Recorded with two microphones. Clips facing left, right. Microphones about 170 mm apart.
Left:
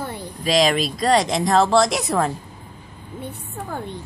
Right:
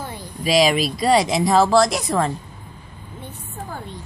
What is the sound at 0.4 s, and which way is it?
Speech, 5° right (ahead or behind).